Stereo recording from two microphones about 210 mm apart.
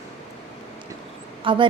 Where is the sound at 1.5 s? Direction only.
25° right (ahead or behind).